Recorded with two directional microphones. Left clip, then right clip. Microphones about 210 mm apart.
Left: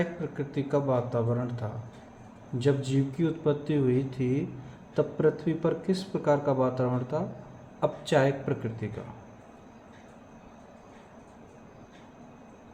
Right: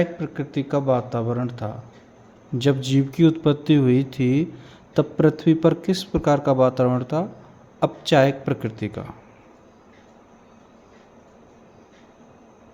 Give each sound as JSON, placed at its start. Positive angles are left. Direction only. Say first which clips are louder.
{"t": 0.0, "sound": "speech", "louder": "right 7 dB", "side_deg": -50}